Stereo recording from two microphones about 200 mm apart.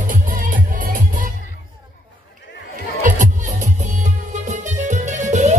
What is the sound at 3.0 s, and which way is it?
Music, 40° right (ahead or behind).